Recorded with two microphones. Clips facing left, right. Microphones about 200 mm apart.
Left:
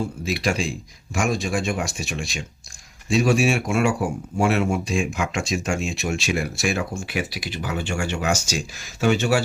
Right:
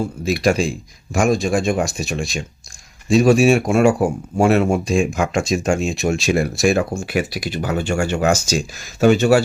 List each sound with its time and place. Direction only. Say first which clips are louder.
0.0 s speech: right 6 dB; 45° right (ahead or behind)